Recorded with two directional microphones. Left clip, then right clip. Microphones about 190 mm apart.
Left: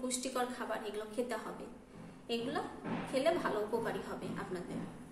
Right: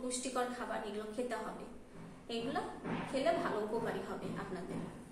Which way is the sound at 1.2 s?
45° left (ahead or behind).